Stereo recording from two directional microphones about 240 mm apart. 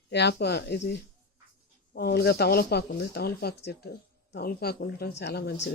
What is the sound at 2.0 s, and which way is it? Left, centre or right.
Speech, left.